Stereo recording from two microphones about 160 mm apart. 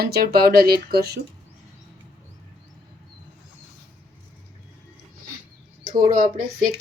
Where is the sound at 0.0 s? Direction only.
75° right (ahead or behind).